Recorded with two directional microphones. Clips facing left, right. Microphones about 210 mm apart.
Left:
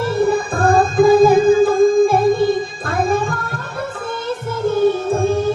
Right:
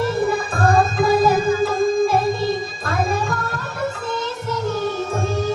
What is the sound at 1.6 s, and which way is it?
Music, 55° left (ahead or behind).